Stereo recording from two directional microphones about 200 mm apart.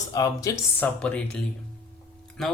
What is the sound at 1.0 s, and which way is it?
Speech, 5° left (ahead or behind).